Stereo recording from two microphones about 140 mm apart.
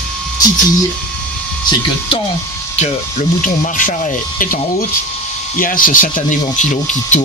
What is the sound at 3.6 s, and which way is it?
Speech, 70° left (ahead or behind).